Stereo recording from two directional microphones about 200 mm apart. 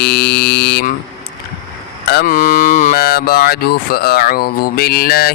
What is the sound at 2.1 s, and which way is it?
Speech, 45° left (ahead or behind).